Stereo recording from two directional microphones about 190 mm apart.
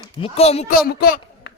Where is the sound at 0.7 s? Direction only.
50° left (ahead or behind).